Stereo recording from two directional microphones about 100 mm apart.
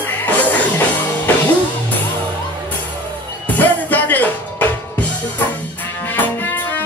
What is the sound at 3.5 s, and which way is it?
Music, 15° left (ahead or behind).